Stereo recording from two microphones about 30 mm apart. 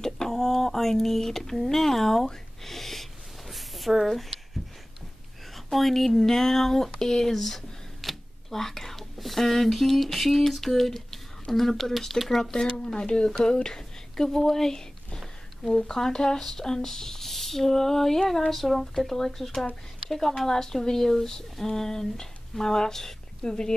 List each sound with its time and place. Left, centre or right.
0.0 s a sound: centre
5.5 s speech: centre
8.0 s a sound: centre
11.5 s speech: centre
12.4 s speech: centre
12.7 s speech: left
14.1 s speech: centre